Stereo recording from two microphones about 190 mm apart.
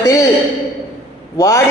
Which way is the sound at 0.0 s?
15° left (ahead or behind).